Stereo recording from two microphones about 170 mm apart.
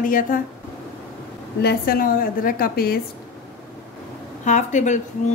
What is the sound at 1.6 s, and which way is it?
A woman's voice, 65° left (ahead or behind).